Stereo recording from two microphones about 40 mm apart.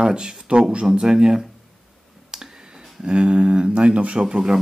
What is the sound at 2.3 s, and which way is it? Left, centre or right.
Clicking, centre.